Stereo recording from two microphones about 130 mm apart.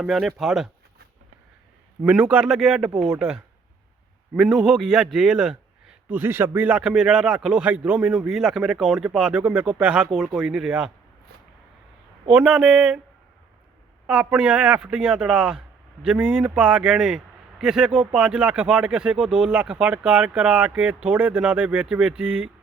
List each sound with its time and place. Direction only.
0.0 s speech: 5° right (ahead or behind)
2.0 s speech: 10° right (ahead or behind)
6.1 s speech: 15° right (ahead or behind)
12.3 s speech: 10° right (ahead or behind)
14.1 s speech: 10° right (ahead or behind)